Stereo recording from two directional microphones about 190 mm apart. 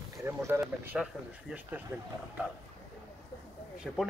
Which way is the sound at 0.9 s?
5° right (ahead or behind).